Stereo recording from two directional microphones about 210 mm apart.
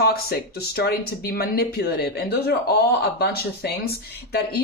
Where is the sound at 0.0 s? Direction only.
45° left (ahead or behind).